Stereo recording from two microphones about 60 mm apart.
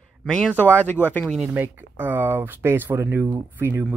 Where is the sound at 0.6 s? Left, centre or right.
Left.